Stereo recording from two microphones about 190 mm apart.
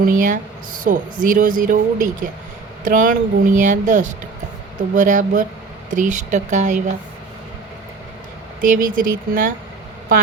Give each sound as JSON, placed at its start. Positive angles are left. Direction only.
{"t": 0.0, "sound": "speech", "side_deg": -45}
{"t": 8.6, "sound": "speech", "side_deg": -45}